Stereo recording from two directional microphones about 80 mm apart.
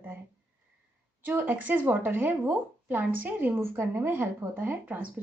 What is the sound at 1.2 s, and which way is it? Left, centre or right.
Speech, right.